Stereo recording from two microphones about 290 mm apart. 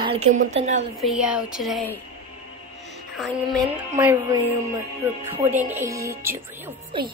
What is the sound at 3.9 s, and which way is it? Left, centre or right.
Speech, centre.